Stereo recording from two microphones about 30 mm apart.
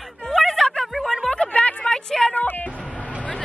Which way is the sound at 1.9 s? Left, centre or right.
Centre.